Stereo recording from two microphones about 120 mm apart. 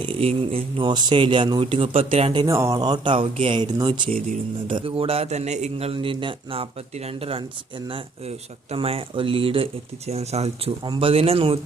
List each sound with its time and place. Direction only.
0.0 s a man's voice: 50° right (ahead or behind)
0.9 s a man's voice: 40° right (ahead or behind)
2.5 s speech: 25° right (ahead or behind)
2.7 s speech: 35° right (ahead or behind)
4.0 s speech: 90° right
4.7 s a man's voice: 50° right (ahead or behind)
10.1 s a man's voice: 60° right (ahead or behind)